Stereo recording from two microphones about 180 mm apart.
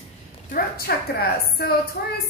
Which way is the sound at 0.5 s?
60° left (ahead or behind).